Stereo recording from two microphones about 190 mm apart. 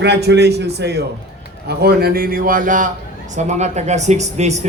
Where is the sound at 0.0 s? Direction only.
60° right (ahead or behind).